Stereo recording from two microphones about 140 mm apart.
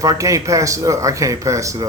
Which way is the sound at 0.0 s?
25° right (ahead or behind).